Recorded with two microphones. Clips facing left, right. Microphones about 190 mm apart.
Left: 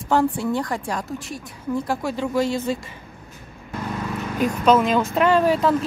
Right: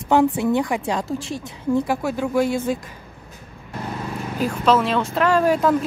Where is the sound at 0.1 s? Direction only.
15° right (ahead or behind).